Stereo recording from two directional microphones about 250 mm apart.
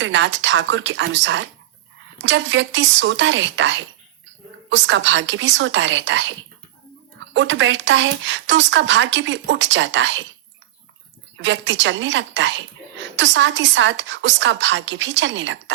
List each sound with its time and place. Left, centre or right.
0.0 s a woman's voice: right
7.3 s a woman's voice: right
11.3 s a woman's voice: right